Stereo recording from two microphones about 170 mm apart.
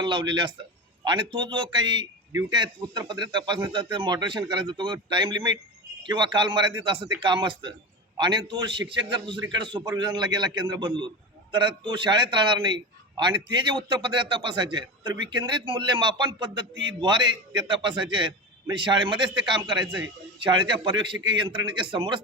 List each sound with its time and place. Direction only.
0.0 s a man's voice: 25° right (ahead or behind)